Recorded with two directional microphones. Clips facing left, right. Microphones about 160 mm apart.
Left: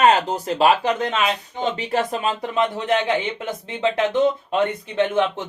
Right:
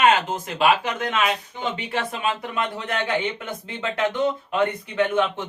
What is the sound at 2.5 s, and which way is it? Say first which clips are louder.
Speech: left 6 dB; 25° left (ahead or behind).